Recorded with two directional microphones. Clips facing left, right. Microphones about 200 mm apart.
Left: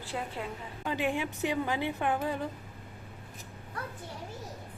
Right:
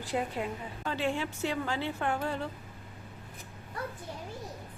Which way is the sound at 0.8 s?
15° left (ahead or behind).